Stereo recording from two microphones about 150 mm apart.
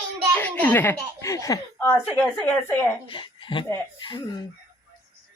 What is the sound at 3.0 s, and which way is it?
Speech, 35° left (ahead or behind).